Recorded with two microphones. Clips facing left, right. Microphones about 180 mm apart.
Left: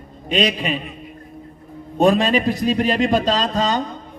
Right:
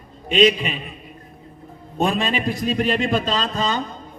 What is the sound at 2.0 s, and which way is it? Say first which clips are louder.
A man's voice: left 6 dB; 40° left (ahead or behind).